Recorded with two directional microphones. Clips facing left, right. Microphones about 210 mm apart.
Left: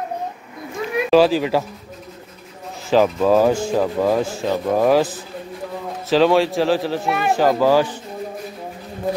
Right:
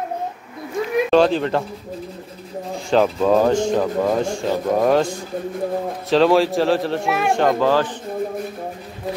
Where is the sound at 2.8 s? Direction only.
5° left (ahead or behind).